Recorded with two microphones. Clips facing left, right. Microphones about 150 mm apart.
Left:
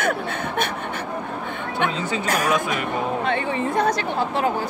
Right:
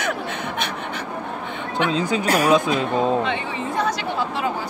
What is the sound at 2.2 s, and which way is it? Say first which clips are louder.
Speech: right 3 dB; 30° right (ahead or behind).